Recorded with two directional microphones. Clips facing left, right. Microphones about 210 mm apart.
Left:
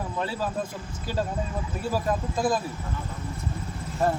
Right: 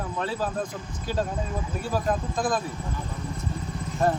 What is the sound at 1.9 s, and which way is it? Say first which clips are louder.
Speech: even; 5° left (ahead or behind).